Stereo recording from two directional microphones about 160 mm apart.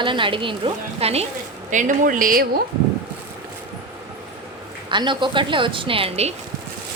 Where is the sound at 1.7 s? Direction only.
55° right (ahead or behind).